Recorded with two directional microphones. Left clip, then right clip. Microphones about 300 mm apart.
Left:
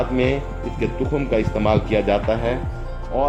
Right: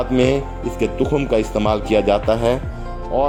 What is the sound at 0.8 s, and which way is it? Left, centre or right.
Speech, right.